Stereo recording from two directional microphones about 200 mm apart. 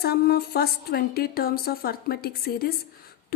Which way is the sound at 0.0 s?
50° left (ahead or behind).